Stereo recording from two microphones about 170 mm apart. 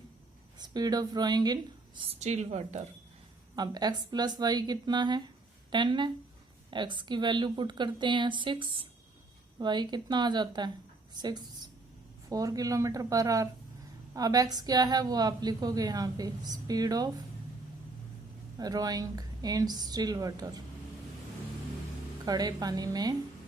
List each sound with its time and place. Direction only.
0.6 s a woman's voice: 25° right (ahead or behind)
2.0 s a woman's voice: 40° right (ahead or behind)
3.5 s a woman's voice: 25° right (ahead or behind)
18.5 s a woman's voice: 20° right (ahead or behind)
22.3 s a woman's voice: 25° right (ahead or behind)